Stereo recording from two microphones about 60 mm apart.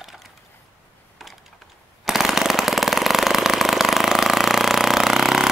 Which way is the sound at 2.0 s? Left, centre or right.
Centre.